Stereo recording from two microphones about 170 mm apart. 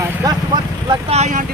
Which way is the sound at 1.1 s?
45° right (ahead or behind).